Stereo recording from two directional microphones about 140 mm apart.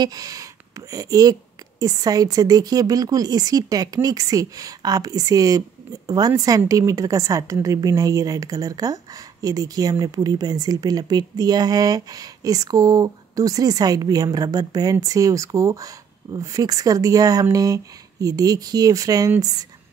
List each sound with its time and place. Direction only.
0.0 s a woman's voice: 25° right (ahead or behind)